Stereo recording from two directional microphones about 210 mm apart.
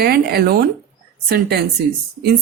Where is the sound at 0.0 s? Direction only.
50° right (ahead or behind).